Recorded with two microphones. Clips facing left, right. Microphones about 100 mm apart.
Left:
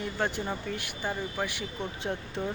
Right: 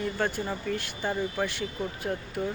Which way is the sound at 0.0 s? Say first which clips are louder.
Right 2 dB; 15° left (ahead or behind).